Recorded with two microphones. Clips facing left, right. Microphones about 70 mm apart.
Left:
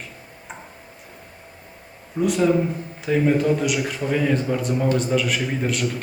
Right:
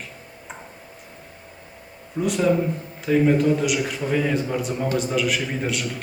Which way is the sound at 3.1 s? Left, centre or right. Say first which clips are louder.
Right 1 dB; centre.